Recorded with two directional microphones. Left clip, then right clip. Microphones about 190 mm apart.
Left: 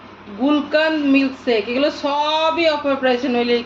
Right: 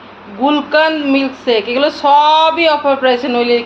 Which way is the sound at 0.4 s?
15° left (ahead or behind).